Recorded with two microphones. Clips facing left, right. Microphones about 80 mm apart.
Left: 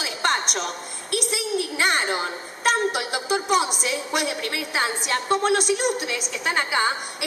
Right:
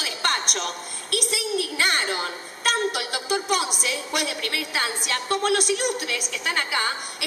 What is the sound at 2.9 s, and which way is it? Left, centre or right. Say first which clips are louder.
Music: left 2 dB; centre.